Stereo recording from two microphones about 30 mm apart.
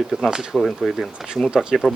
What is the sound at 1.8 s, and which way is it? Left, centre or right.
Speech, left.